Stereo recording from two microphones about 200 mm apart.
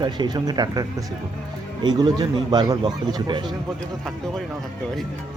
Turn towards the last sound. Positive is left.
turn(degrees=-20)  # may be behind; listen again after turning